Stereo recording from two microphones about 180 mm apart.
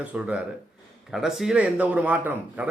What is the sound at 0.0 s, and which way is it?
A man's voice, 5° right (ahead or behind).